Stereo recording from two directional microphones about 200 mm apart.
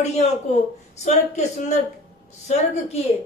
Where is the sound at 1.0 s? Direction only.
35° left (ahead or behind).